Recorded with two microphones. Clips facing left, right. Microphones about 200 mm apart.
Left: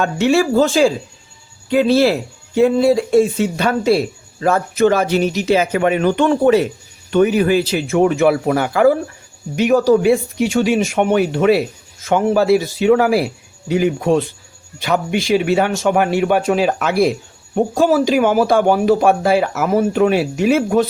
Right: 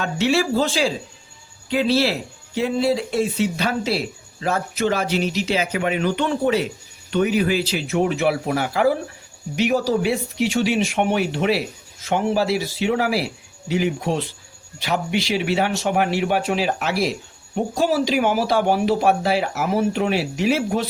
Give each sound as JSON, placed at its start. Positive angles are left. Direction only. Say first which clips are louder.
{"t": 0.0, "sound": "speech", "louder": "left 5 dB", "side_deg": 50}